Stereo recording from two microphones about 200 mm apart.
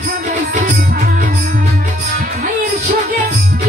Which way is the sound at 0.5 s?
40° right (ahead or behind).